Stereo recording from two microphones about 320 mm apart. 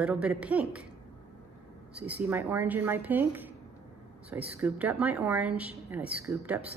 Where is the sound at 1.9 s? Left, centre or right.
Centre.